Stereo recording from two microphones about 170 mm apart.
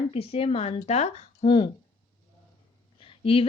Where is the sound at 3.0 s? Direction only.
35° left (ahead or behind).